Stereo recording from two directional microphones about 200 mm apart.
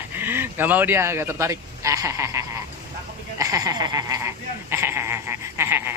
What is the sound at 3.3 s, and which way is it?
Goat, 15° right (ahead or behind).